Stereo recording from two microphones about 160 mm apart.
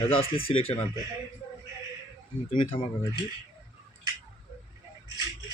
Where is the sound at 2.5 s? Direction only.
35° left (ahead or behind).